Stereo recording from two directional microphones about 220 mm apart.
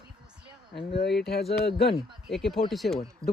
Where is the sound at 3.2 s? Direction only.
15° right (ahead or behind).